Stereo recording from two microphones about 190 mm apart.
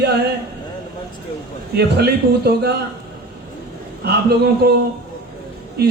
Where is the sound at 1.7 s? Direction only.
55° right (ahead or behind).